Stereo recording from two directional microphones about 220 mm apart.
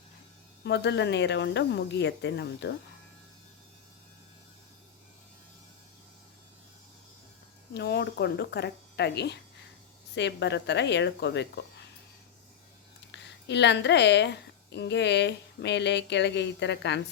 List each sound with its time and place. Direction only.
0.6 s speech: 50° left (ahead or behind)
7.7 s speech: 50° left (ahead or behind)
13.1 s a woman's voice: 50° left (ahead or behind)